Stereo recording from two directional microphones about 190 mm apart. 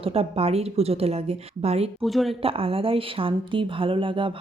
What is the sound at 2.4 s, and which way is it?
Speech, 30° right (ahead or behind).